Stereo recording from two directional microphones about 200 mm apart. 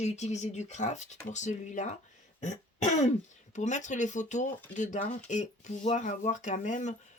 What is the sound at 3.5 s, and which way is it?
Speech, 35° left (ahead or behind).